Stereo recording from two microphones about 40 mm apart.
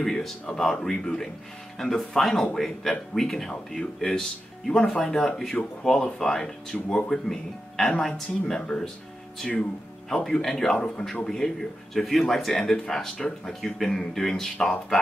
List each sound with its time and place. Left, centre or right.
0.0 s a sound: centre
0.6 s speech: centre
6.7 s speech: left
7.2 s speech: centre
10.0 s speech: centre